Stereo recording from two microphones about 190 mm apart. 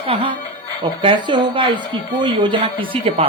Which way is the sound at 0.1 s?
25° right (ahead or behind).